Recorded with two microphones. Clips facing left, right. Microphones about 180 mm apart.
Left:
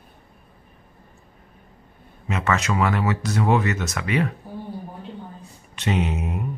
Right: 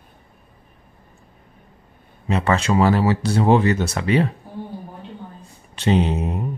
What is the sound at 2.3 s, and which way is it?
Speech, 30° right (ahead or behind).